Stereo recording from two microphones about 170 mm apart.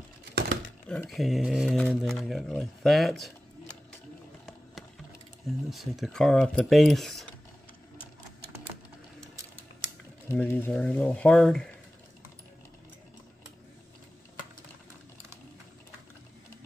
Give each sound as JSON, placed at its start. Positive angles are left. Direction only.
{"t": 0.3, "sound": "a sound", "side_deg": -75}
{"t": 0.8, "sound": "speech", "side_deg": 5}
{"t": 5.7, "sound": "speech", "side_deg": 0}
{"t": 10.2, "sound": "speech", "side_deg": 10}